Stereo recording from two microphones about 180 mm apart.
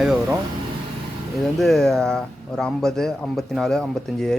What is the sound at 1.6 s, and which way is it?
Speech, centre (ahead or behind).